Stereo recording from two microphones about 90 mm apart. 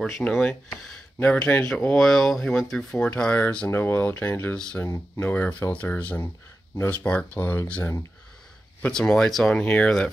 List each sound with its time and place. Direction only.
0.4 s speech: 10° left (ahead or behind)
4.8 s speech: 35° left (ahead or behind)
5.2 s speech: 15° left (ahead or behind)
8.9 s speech: 10° left (ahead or behind)